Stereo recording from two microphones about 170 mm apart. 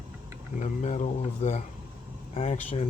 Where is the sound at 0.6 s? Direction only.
45° left (ahead or behind).